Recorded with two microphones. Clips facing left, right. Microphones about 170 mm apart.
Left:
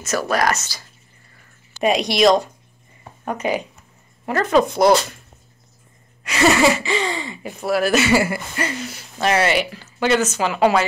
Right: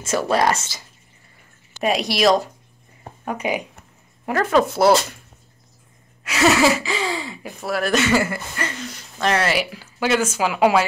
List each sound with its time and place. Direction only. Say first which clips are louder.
0.0 s speech: right 1 dB; 25° right (ahead or behind)
1.8 s speech: left 3 dB; 5° right (ahead or behind)
6.2 s speech: left 1 dB; centre (ahead or behind)